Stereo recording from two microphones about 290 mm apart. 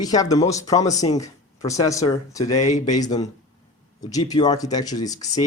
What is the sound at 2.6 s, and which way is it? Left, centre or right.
Speech, left.